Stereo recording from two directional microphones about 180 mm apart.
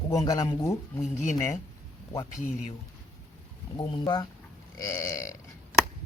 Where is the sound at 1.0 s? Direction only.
40° left (ahead or behind).